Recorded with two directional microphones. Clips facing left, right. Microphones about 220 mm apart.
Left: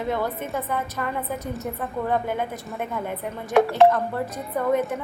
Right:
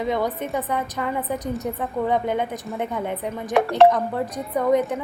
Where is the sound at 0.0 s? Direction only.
15° right (ahead or behind).